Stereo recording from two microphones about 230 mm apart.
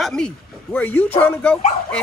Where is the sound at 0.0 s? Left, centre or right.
Centre.